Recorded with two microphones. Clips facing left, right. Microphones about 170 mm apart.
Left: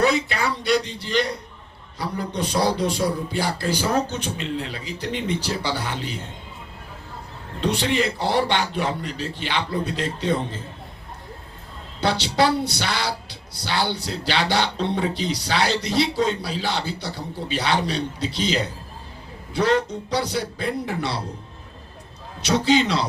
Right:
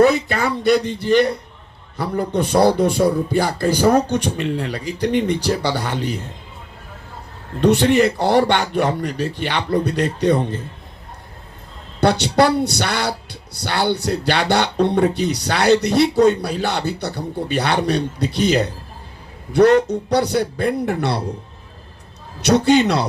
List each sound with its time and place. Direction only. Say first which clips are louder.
0.0 s music: right 6 dB; 50° right (ahead or behind)
7.6 s music: right 8 dB; 50° right (ahead or behind)
12.0 s speech: right 5 dB; 55° right (ahead or behind)
22.4 s speech: right 5 dB; 60° right (ahead or behind)